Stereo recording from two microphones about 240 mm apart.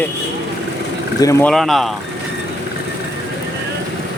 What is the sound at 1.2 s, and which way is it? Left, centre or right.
Speech, centre.